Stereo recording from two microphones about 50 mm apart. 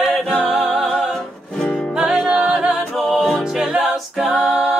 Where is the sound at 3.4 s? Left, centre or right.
Centre.